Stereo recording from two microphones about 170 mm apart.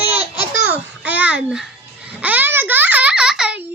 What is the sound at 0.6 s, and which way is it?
Babbling, 10° right (ahead or behind).